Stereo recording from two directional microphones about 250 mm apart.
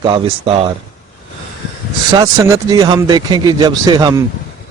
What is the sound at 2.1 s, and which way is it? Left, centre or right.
Speech, centre.